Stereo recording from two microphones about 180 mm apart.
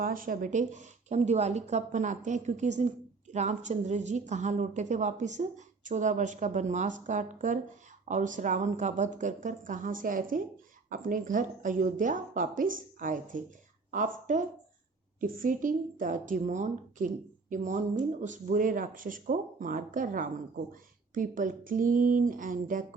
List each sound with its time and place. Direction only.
0.0 s a woman's voice: 50° right (ahead or behind)